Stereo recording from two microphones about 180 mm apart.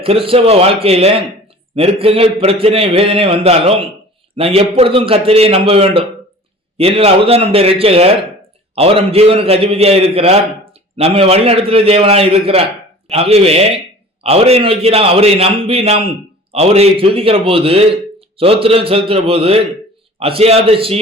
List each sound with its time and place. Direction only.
0.0 s a man's voice: 30° right (ahead or behind)